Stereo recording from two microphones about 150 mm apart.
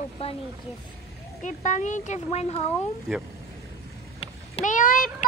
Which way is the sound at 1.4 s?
55° left (ahead or behind).